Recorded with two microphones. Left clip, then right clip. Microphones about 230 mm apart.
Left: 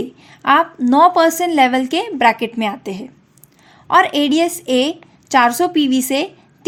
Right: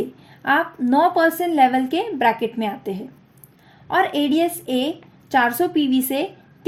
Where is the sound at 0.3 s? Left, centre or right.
Left.